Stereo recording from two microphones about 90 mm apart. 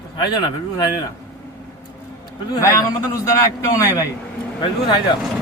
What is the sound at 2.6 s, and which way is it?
A man's voice, 40° left (ahead or behind).